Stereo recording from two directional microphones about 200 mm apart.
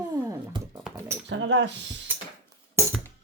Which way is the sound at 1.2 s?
65° right (ahead or behind).